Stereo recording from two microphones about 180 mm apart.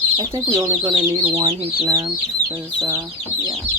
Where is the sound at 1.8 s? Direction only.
20° right (ahead or behind).